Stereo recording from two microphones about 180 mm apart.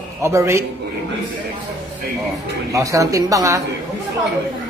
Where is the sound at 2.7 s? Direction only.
20° right (ahead or behind).